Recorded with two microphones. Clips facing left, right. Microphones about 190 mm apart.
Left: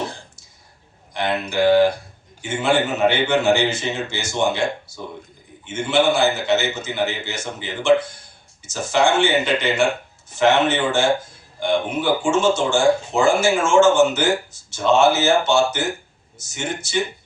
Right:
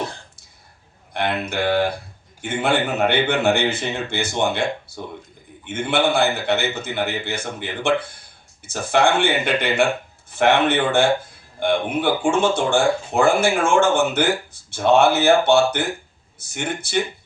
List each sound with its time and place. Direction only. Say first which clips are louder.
1.1 s speech: left 1 dB; 60° right (ahead or behind)